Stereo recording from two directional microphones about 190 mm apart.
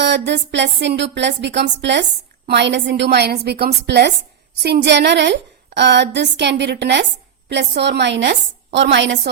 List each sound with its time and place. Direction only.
0.0 s a woman's voice: 65° right (ahead or behind)